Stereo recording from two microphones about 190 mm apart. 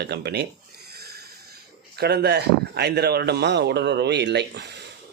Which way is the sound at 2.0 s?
55° right (ahead or behind).